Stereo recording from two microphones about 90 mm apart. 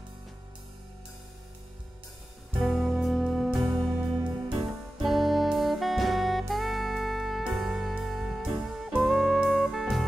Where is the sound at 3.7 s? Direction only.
15° right (ahead or behind).